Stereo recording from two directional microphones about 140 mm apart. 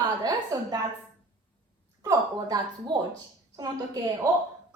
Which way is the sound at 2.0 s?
25° right (ahead or behind).